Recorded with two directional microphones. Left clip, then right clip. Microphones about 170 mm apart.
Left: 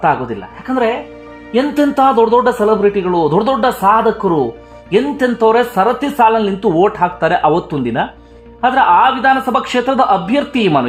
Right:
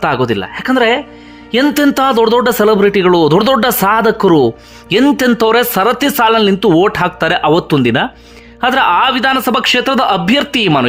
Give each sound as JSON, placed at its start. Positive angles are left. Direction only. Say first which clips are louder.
{"t": 0.0, "sound": "speech", "louder": "right 1 dB", "side_deg": -25}